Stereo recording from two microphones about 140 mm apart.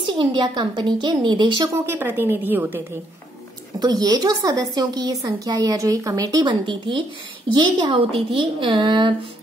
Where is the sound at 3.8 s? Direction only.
30° right (ahead or behind).